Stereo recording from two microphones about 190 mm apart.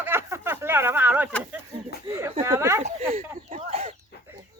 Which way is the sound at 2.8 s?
35° right (ahead or behind).